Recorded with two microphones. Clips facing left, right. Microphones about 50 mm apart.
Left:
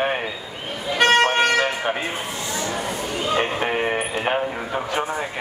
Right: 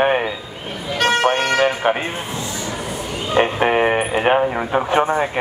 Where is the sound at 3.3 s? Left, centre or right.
Right.